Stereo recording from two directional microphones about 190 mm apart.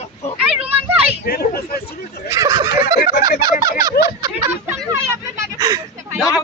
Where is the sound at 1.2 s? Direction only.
55° left (ahead or behind).